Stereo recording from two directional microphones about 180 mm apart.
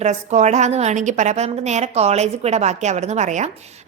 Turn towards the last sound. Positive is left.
turn(degrees=-40)  # may be behind; listen again after turning